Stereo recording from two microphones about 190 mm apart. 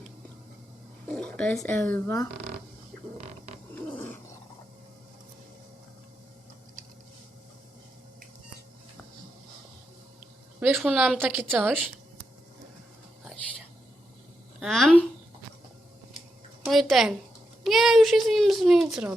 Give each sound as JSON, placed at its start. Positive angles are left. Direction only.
{"t": 1.0, "sound": "speech", "side_deg": 5}
{"t": 3.2, "sound": "a sound", "side_deg": -35}
{"t": 3.8, "sound": "dog", "side_deg": 10}
{"t": 10.8, "sound": "a child's voice", "side_deg": -5}
{"t": 14.6, "sound": "a child's voice", "side_deg": 0}
{"t": 16.6, "sound": "a child's voice", "side_deg": 0}